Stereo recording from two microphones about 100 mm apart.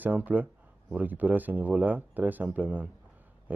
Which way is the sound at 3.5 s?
15° right (ahead or behind).